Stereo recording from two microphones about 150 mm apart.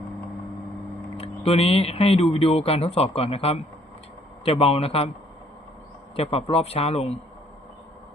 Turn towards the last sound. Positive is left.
turn(degrees=45)  # may be behind; listen again after turning